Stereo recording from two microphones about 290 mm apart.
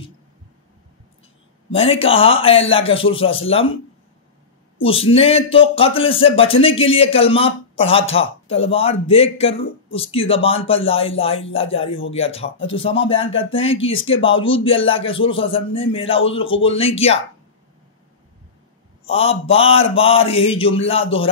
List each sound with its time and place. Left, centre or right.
1.7 s speech: centre
4.7 s speech: centre
19.0 s speech: centre